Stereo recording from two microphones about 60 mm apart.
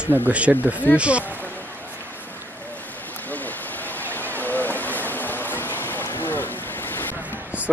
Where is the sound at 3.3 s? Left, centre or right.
Left.